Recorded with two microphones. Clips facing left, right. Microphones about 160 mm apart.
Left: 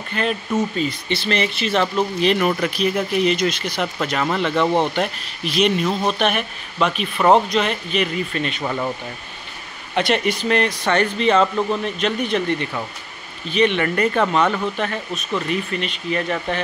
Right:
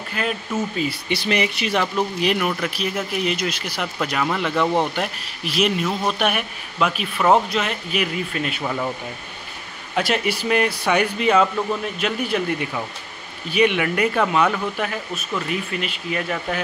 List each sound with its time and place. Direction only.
0.1 s speech: 5° right (ahead or behind)
9.9 s speech: 5° right (ahead or behind)